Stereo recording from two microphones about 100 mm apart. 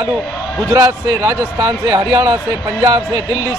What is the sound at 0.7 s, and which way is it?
A man's voice, 30° right (ahead or behind).